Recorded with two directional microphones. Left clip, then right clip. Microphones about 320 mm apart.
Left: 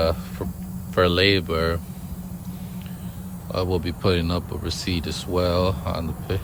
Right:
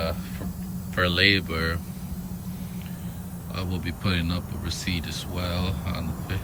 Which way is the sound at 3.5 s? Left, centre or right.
Centre.